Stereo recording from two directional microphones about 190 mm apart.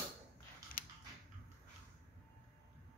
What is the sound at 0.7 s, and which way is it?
Creak, 45° left (ahead or behind).